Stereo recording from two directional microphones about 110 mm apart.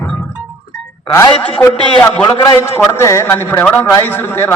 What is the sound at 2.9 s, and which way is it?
Speech, 25° left (ahead or behind).